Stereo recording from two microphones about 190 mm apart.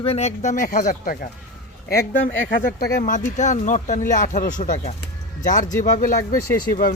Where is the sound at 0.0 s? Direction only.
35° left (ahead or behind); by 2.7 s 50° left (ahead or behind).